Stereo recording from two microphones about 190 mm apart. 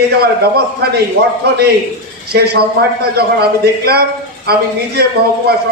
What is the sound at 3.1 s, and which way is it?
A man's voice, 55° right (ahead or behind).